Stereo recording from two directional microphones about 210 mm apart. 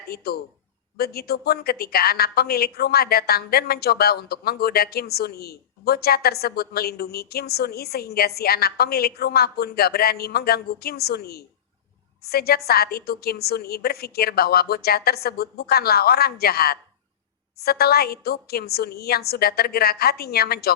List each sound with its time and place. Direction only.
0.1 s a woman's voice: 50° left (ahead or behind)